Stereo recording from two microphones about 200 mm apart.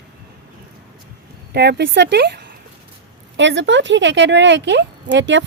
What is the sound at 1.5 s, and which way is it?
A woman's voice, 55° right (ahead or behind).